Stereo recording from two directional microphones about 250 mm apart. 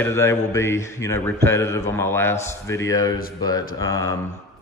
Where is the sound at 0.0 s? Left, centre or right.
Centre.